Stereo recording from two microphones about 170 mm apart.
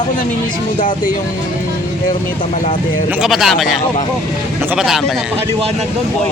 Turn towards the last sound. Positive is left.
turn(degrees=0)  # may be behind; listen again after turning